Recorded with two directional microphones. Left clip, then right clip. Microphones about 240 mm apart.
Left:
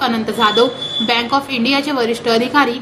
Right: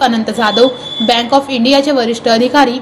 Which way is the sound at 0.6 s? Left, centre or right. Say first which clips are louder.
Right 4 dB; centre.